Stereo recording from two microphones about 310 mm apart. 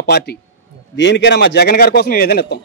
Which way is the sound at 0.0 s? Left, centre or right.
Left.